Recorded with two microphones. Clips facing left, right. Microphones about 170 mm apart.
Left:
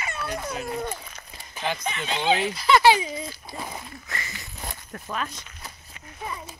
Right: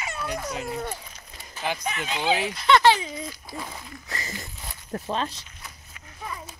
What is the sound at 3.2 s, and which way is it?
Speech, 25° left (ahead or behind).